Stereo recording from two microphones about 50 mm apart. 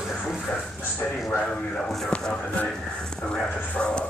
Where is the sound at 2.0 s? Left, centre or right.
Centre.